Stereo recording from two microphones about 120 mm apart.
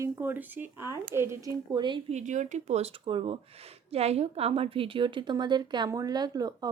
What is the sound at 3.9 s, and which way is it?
Speech, 60° right (ahead or behind).